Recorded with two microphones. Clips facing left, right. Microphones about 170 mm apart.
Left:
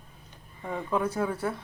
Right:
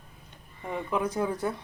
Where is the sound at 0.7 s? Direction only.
15° right (ahead or behind).